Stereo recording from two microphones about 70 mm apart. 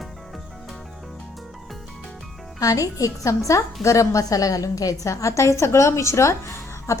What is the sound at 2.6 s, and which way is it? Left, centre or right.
A woman's voice, left.